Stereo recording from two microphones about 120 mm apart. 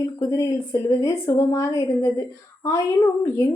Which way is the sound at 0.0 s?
25° left (ahead or behind).